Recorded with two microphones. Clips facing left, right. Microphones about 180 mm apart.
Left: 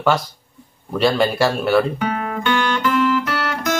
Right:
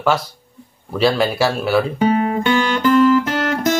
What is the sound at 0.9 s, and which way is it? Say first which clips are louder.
Speech: even; centre (ahead or behind).